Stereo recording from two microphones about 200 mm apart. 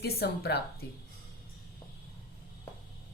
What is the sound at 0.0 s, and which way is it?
Speech, 55° left (ahead or behind).